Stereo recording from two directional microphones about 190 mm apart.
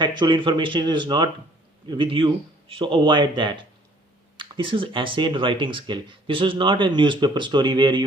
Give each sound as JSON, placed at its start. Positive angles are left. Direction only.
{"t": 0.0, "sound": "speech", "side_deg": -25}